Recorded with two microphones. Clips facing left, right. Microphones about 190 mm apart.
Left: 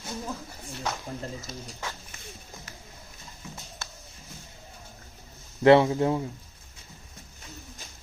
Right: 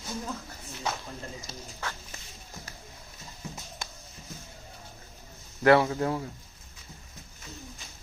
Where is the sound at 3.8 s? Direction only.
15° right (ahead or behind).